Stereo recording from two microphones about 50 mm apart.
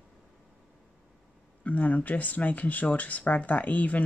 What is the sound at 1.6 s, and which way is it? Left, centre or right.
Speech, left.